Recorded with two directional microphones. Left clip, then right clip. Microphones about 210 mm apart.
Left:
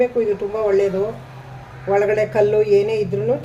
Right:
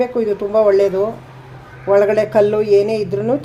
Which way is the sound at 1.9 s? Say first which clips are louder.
Right 4 dB; 30° right (ahead or behind).